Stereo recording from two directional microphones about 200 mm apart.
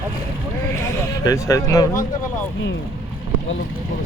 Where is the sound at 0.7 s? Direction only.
15° left (ahead or behind).